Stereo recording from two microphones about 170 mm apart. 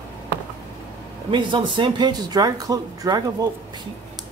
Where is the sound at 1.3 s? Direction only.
30° right (ahead or behind).